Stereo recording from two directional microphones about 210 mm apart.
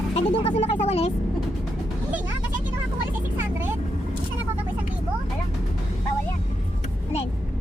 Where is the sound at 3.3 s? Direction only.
10° right (ahead or behind).